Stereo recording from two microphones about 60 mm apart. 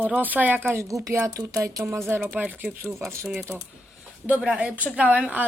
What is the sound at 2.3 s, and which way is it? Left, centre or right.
Speech, right.